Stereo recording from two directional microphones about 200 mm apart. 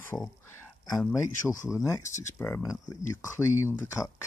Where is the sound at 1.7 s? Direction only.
15° left (ahead or behind).